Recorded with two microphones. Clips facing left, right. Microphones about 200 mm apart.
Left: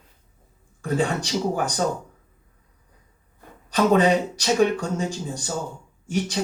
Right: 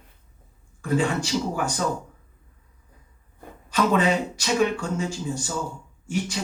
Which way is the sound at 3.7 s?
35° left (ahead or behind).